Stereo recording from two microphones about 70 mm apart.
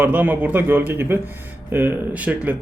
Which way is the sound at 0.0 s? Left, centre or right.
Right.